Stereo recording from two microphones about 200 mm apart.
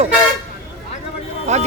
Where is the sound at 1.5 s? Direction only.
35° right (ahead or behind).